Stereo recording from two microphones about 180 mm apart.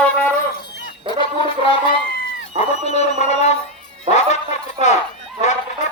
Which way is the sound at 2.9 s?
40° left (ahead or behind).